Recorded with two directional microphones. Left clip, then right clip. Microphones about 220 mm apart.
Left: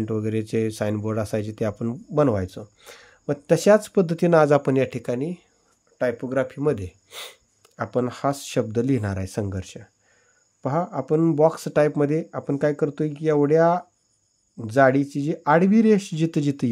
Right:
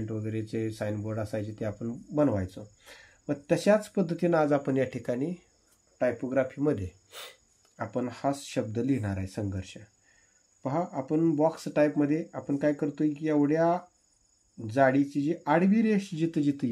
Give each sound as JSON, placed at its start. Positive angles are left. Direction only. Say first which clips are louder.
{"t": 0.0, "sound": "speech", "louder": "left 9 dB", "side_deg": 50}
{"t": 7.7, "sound": "speech", "louder": "left 8 dB", "side_deg": 50}